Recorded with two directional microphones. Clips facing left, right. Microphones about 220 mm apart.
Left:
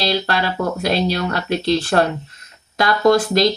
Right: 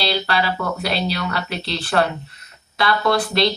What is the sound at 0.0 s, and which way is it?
A woman's voice, 45° left (ahead or behind).